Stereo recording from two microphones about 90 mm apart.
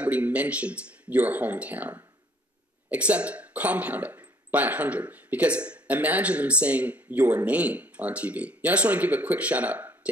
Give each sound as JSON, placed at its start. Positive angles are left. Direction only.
{"t": 0.0, "sound": "speech", "side_deg": -15}